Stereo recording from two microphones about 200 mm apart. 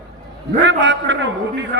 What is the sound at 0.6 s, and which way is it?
A man's voice, 65° right (ahead or behind).